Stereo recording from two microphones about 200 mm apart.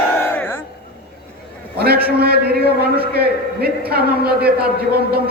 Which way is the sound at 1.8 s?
50° right (ahead or behind).